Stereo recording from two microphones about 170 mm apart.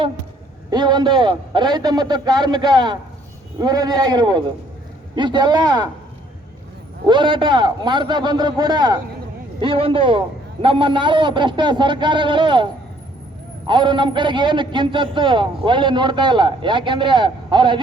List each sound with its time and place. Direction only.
0.7 s a man's voice: 25° right (ahead or behind)
7.1 s a man's voice: 30° right (ahead or behind)
13.7 s a man's voice: 30° right (ahead or behind)